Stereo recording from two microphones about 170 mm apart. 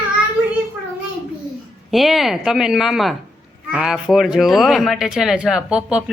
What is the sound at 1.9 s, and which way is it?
Speech, centre (ahead or behind).